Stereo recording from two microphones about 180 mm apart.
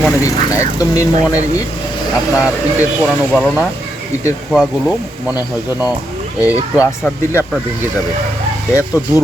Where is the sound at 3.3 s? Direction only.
5° left (ahead or behind).